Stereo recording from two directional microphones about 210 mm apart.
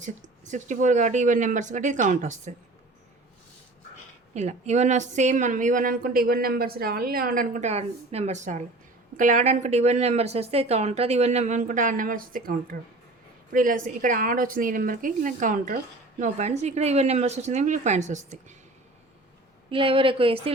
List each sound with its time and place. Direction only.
0.0 s a woman's voice: 35° right (ahead or behind)
4.4 s a woman's voice: 30° right (ahead or behind)
19.7 s a woman's voice: 25° right (ahead or behind)